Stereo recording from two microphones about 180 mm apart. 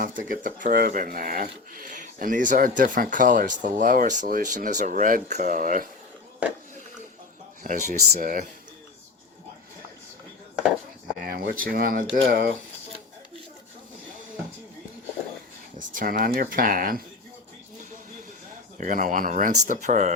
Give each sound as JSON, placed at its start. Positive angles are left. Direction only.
{"t": 0.0, "sound": "speech", "side_deg": -50}
{"t": 7.6, "sound": "speech", "side_deg": -45}
{"t": 11.2, "sound": "speech", "side_deg": -55}
{"t": 15.9, "sound": "speech", "side_deg": -50}
{"t": 18.8, "sound": "speech", "side_deg": -50}